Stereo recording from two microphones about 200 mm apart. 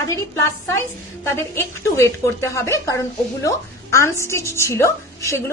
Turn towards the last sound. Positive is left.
turn(degrees=15)  # may be behind; listen again after turning